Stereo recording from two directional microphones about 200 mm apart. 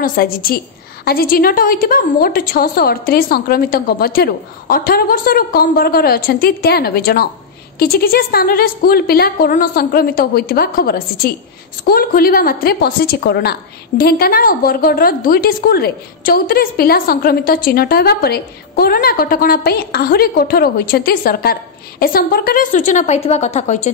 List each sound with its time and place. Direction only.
0.0 s a woman's voice: 50° left (ahead or behind)